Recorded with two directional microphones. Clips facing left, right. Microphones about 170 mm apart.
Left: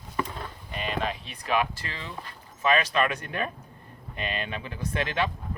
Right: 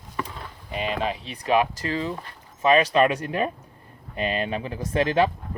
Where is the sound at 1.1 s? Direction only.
35° right (ahead or behind).